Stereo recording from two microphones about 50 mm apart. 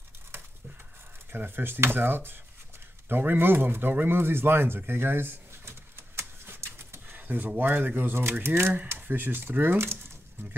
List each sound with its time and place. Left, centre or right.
1.3 s speech: right
4.0 s a sound: right
7.1 s speech: right
8.2 s speech: right